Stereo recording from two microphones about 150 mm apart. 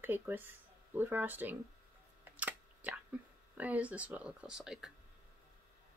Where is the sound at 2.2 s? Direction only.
10° right (ahead or behind).